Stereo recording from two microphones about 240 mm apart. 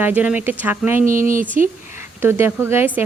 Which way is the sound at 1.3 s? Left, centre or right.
Right.